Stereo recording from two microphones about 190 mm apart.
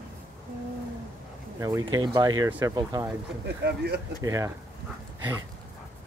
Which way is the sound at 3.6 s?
60° right (ahead or behind).